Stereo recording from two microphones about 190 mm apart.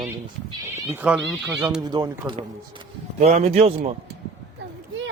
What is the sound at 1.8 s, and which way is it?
Speech, 20° right (ahead or behind).